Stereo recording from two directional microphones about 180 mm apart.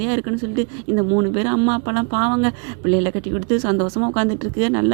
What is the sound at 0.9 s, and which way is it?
Speech, 30° right (ahead or behind).